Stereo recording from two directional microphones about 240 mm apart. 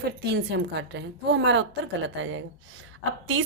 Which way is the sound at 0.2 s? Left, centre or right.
Right.